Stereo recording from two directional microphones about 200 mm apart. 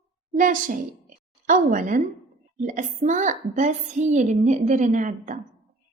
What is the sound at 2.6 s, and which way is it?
A woman's voice, 40° right (ahead or behind).